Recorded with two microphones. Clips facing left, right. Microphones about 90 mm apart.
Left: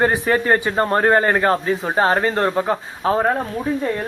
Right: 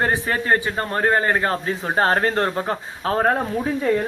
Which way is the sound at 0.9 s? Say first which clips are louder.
Left 3 dB; 20° left (ahead or behind).